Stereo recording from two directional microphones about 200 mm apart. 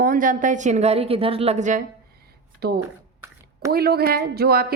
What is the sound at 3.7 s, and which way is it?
Speech, 50° right (ahead or behind).